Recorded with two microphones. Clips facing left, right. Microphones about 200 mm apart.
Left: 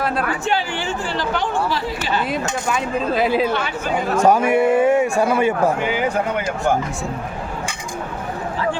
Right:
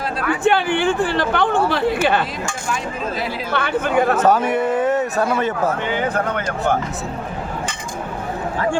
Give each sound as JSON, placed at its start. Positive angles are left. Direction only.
{"t": 0.4, "sound": "speech", "side_deg": -55}
{"t": 3.5, "sound": "speech", "side_deg": -60}
{"t": 4.1, "sound": "a man's voice", "side_deg": 10}